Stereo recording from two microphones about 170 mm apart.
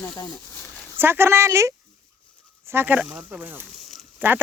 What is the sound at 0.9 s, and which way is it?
Speech, 15° right (ahead or behind).